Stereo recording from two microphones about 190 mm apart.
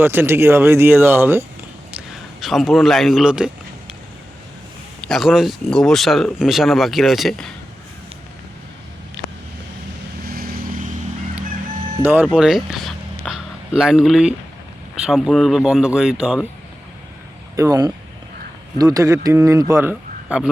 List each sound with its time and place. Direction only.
0.0 s speech: 10° right (ahead or behind)
1.9 s a man's voice: centre (ahead or behind)
5.0 s speech: centre (ahead or behind)
10.2 s vehicle: 50° right (ahead or behind)
12.2 s speech: centre (ahead or behind)
17.6 s speech: 20° right (ahead or behind)